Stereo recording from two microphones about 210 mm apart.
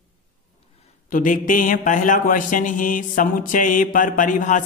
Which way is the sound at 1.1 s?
40° left (ahead or behind).